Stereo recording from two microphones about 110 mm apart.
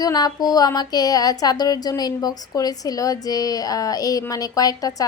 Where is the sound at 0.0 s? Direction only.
35° left (ahead or behind).